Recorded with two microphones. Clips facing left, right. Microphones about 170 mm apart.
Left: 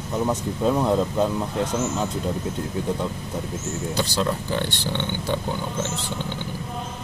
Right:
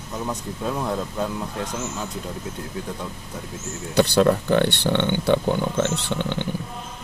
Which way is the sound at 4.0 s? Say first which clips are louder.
Right 9 dB; 60° right (ahead or behind).